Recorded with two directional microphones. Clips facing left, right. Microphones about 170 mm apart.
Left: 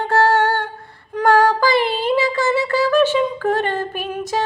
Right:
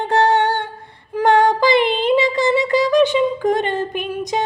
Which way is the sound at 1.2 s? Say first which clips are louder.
Right 1 dB; 20° right (ahead or behind).